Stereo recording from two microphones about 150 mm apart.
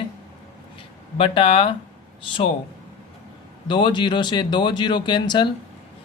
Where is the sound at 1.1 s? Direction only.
35° left (ahead or behind).